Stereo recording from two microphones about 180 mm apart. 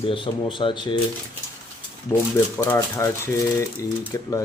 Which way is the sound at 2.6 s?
15° left (ahead or behind).